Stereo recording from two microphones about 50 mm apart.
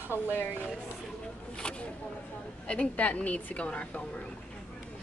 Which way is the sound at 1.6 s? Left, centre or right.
Centre.